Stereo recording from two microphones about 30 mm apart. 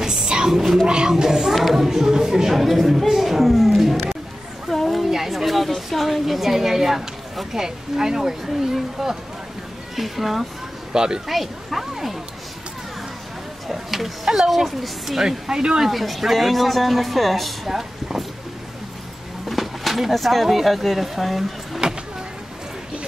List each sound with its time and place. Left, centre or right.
0.3 s a sound: right
0.8 s speech: right
1.1 s speech: centre
1.5 s speech: centre
4.7 s a sound: centre
5.1 s speech: centre
10.9 s speech: right
11.2 s speech: centre
13.7 s speech: centre; by 15.8 s right
15.9 s speech: centre
17.6 s speech: centre
19.5 s speech: centre